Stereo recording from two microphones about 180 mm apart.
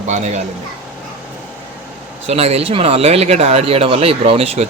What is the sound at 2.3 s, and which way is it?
Speech, 35° right (ahead or behind).